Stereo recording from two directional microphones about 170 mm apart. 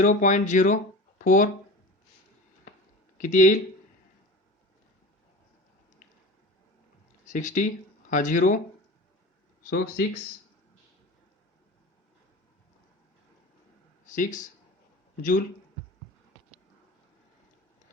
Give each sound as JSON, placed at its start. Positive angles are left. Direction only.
{"t": 0.0, "sound": "speech", "side_deg": 50}
{"t": 3.2, "sound": "speech", "side_deg": 50}
{"t": 7.3, "sound": "speech", "side_deg": 50}
{"t": 9.6, "sound": "speech", "side_deg": 65}
{"t": 14.0, "sound": "speech", "side_deg": 50}